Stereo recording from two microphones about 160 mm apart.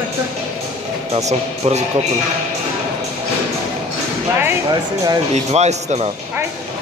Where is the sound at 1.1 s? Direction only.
45° right (ahead or behind).